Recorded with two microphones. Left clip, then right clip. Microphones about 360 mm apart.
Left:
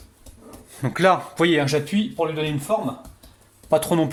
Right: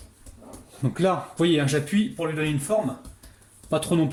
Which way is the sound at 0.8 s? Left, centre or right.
Left.